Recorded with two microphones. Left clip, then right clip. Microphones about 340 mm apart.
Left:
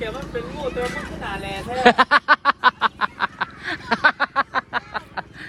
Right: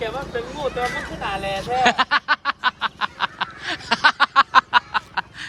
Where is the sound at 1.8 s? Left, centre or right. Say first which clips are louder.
Left 4 dB; centre.